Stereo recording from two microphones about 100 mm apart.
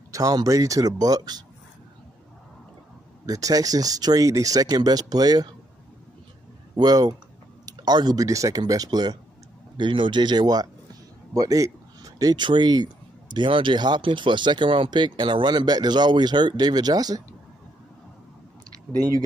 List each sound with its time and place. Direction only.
0.1 s speech: 35° right (ahead or behind)
3.3 s speech: 35° right (ahead or behind)
6.7 s speech: 40° right (ahead or behind)
9.8 s speech: 55° right (ahead or behind)